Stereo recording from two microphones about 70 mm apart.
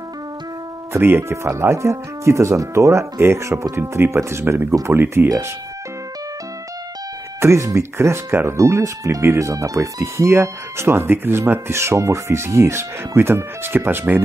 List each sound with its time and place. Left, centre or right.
0.9 s speech: right
5.0 s speech: right
7.3 s speech: right
8.3 s speech: right
8.5 s speech: right